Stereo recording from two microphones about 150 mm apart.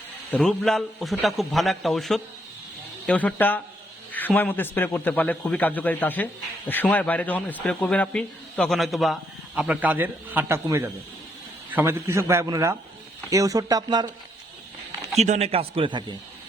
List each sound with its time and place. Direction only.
0.3 s a man's voice: 5° left (ahead or behind); by 14.1 s 25° right (ahead or behind)
15.2 s a man's voice: 45° right (ahead or behind); by 16.1 s 30° right (ahead or behind)